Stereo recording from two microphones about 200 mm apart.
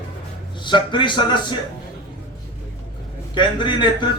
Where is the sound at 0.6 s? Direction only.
25° left (ahead or behind).